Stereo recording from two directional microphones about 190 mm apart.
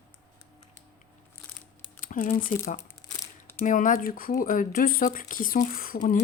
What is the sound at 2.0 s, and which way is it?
Speech, 45° left (ahead or behind).